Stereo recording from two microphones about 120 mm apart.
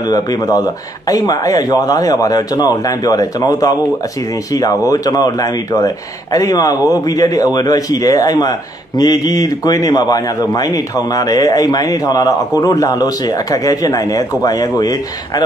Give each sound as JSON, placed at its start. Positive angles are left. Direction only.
{"t": 0.0, "sound": "a man's voice", "side_deg": 30}